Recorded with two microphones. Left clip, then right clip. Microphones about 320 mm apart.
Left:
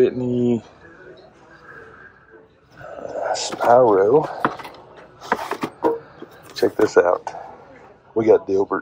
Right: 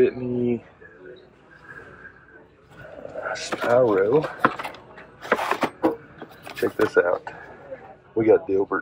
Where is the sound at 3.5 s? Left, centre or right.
Centre.